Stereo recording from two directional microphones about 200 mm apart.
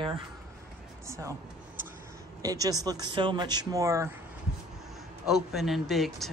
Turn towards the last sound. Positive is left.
turn(degrees=0)  # may be behind; listen again after turning